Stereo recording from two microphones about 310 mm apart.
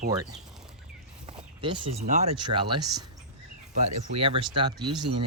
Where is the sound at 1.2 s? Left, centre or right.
Centre.